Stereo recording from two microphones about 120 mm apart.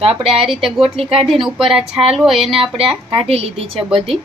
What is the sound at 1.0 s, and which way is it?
Speech, 50° right (ahead or behind).